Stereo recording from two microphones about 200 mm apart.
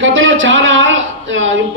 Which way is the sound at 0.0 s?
70° right (ahead or behind).